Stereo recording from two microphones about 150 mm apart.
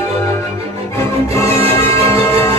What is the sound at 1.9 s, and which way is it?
Music, 20° left (ahead or behind).